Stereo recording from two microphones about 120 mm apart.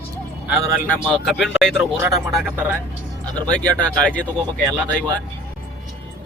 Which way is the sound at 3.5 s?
10° left (ahead or behind).